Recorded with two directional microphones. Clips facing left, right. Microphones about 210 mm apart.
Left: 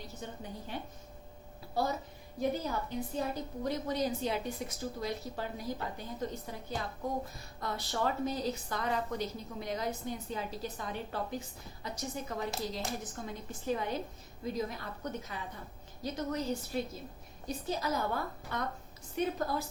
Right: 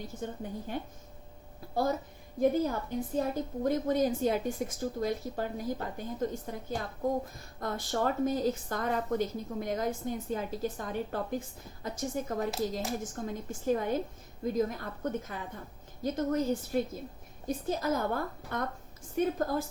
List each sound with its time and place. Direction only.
0.1 s speech: 50° right (ahead or behind)